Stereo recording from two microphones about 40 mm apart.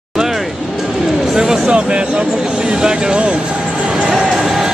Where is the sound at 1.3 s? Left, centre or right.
Centre.